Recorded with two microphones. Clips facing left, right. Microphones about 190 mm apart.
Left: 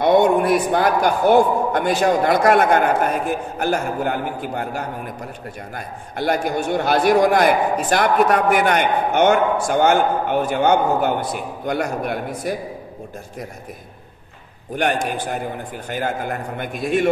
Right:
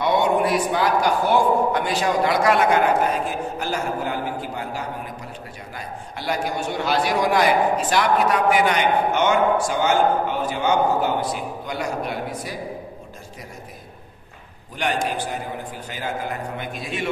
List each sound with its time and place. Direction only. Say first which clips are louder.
0.0 s a man's voice: left 5 dB; 50° left (ahead or behind)
14.8 s a man's voice: left 3 dB; 55° left (ahead or behind)